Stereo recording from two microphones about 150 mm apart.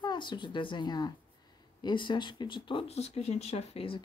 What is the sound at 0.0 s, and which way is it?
Speech, 30° left (ahead or behind).